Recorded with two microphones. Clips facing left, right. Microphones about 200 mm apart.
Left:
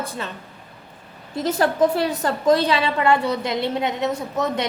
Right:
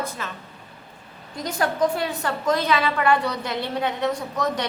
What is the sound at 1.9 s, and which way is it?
A woman's voice, 35° left (ahead or behind).